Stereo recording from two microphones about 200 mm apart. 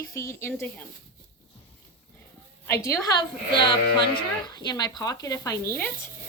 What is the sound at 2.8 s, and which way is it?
A woman's voice, 15° left (ahead or behind).